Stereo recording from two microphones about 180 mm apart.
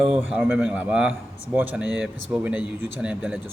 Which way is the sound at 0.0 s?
5° right (ahead or behind).